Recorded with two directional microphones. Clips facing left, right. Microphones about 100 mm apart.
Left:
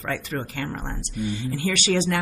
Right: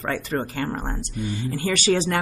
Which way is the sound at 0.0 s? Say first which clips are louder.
Right 3 dB; 35° right (ahead or behind).